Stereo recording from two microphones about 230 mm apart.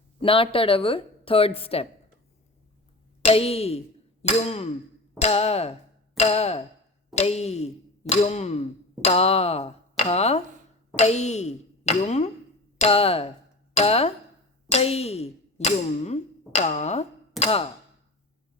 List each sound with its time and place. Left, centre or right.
0.2 s speech: left
3.2 s speech: left